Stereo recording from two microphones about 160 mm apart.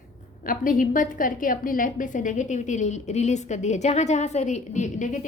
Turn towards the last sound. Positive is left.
turn(degrees=50)  # may be behind; listen again after turning